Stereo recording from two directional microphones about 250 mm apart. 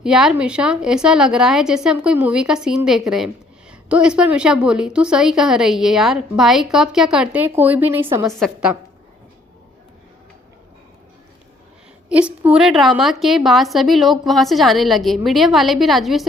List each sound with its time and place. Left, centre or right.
0.0 s a woman's voice: centre
8.3 s a woman's voice: centre
12.0 s a woman's voice: centre